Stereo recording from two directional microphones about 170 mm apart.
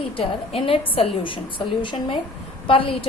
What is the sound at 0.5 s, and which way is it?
A woman's voice, 35° left (ahead or behind).